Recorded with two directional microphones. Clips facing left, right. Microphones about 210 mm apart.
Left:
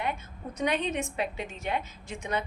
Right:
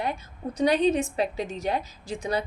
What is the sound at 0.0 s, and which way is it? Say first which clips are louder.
A woman's voice: right 3 dB; 35° right (ahead or behind).